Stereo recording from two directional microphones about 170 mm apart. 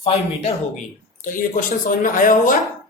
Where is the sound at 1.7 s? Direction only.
55° left (ahead or behind).